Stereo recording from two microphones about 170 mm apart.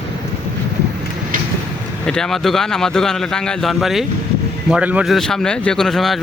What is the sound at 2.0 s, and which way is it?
Speech, 5° left (ahead or behind).